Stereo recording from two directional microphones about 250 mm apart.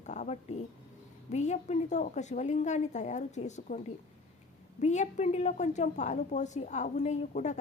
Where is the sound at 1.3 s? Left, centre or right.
Left.